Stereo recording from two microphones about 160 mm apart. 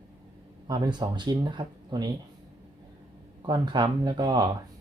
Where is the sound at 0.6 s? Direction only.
30° right (ahead or behind).